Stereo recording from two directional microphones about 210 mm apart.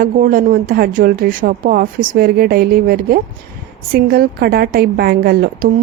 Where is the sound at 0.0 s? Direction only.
40° right (ahead or behind).